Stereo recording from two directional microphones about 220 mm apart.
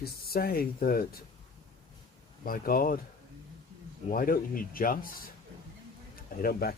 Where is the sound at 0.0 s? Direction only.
45° left (ahead or behind).